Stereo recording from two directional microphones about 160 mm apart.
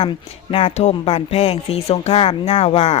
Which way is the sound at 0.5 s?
40° left (ahead or behind).